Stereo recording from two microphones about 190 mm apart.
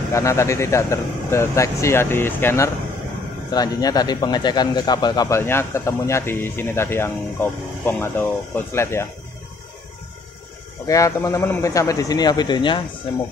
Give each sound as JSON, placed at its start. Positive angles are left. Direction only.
{"t": 0.1, "sound": "speech", "side_deg": 15}
{"t": 10.9, "sound": "speech", "side_deg": 15}